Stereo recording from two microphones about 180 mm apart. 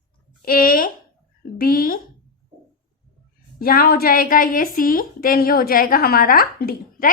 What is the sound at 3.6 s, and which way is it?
A woman's voice, 55° left (ahead or behind).